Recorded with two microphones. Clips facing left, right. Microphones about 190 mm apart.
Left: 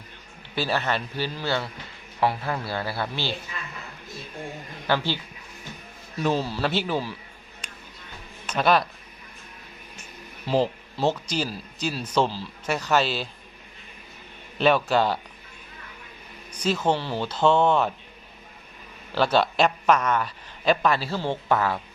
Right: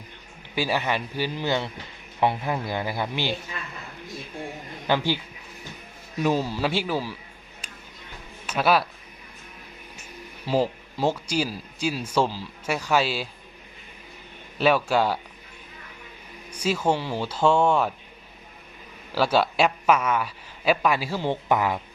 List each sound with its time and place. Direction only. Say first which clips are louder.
0.5 s speech: right 1 dB; 10° right (ahead or behind)
4.9 s speech: right 1 dB; 15° right (ahead or behind)
8.4 s speech: even; 5° right (ahead or behind)
10.4 s speech: even; 10° right (ahead or behind)
14.6 s speech: even; 5° right (ahead or behind)
16.5 s speech: even; 10° right (ahead or behind)
19.1 s speech: even; 5° right (ahead or behind)